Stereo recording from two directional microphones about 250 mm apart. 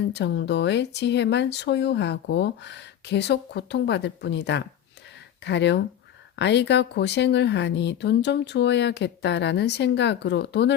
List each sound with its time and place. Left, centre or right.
0.1 s speech: left